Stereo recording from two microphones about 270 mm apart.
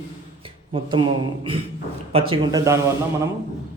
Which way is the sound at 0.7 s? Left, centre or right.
Centre.